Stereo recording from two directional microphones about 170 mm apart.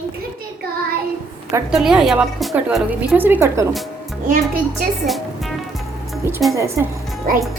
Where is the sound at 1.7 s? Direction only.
5° right (ahead or behind).